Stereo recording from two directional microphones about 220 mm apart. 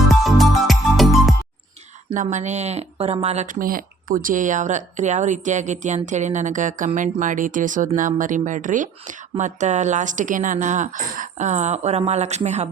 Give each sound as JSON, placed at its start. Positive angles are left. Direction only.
{"t": 0.1, "sound": "music", "side_deg": 0}
{"t": 2.1, "sound": "speech", "side_deg": -30}